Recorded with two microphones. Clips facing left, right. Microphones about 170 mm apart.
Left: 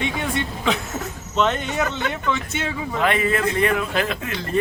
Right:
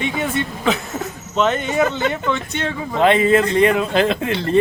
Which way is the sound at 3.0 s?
25° right (ahead or behind).